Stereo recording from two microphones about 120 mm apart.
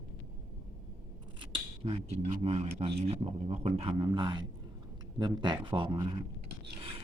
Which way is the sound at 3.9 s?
40° right (ahead or behind).